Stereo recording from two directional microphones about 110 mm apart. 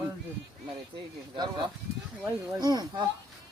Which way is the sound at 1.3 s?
40° right (ahead or behind).